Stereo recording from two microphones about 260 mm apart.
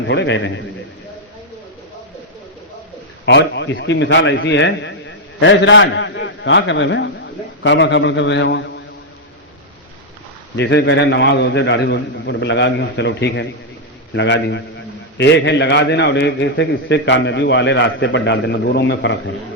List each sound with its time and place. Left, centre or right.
0.1 s a man's voice: left
3.2 s a man's voice: left
10.6 s a man's voice: left